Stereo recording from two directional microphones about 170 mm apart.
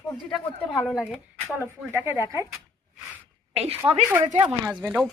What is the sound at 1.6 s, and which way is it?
Speech, 15° right (ahead or behind).